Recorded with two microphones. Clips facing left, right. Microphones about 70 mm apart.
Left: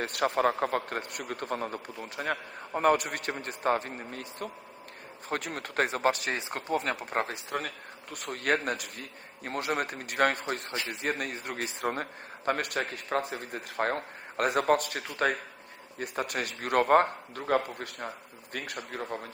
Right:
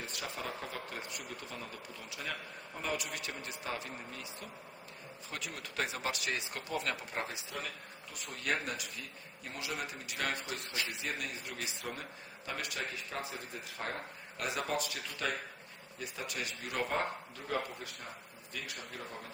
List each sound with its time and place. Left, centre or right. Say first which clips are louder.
0.0 s a man's voice: left 15 dB; left